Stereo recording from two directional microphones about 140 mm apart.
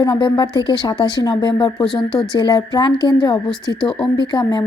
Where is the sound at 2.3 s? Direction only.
35° left (ahead or behind).